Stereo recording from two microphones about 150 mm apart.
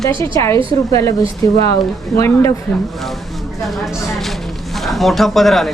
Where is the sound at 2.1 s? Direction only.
20° left (ahead or behind).